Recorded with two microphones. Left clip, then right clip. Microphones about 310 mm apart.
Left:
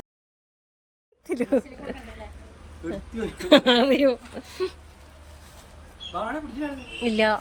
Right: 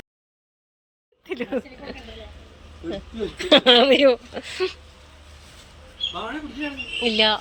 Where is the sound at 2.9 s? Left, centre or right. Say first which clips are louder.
Right 4 dB; centre.